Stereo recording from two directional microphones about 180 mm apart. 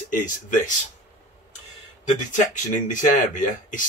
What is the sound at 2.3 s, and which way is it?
Speech, 45° left (ahead or behind).